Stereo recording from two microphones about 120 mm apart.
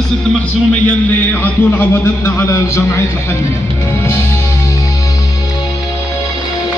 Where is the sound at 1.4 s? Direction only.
20° left (ahead or behind).